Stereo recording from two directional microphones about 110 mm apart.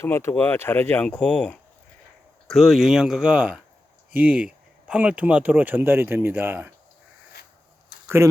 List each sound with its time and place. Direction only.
0.0 s speech: 25° left (ahead or behind); by 6.7 s 20° right (ahead or behind)
8.0 s speech: 25° right (ahead or behind)